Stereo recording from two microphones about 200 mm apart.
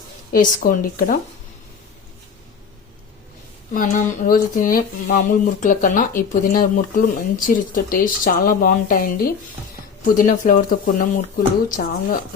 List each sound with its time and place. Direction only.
0.3 s speech: 45° left (ahead or behind)
3.8 s speech: 40° left (ahead or behind)